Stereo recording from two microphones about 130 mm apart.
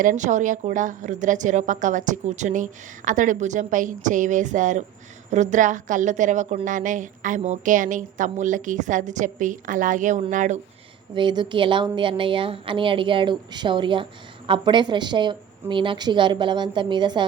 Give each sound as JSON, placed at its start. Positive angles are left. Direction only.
{"t": 0.0, "sound": "a woman's voice", "side_deg": -80}
{"t": 6.7, "sound": "a woman's voice", "side_deg": -85}
{"t": 11.1, "sound": "a woman's voice", "side_deg": -35}